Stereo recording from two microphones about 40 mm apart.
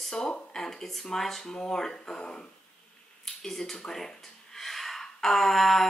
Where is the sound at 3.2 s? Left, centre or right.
Centre.